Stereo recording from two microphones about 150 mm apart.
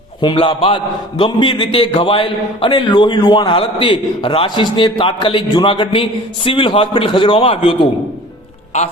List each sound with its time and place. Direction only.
0.2 s a man's voice: 35° left (ahead or behind)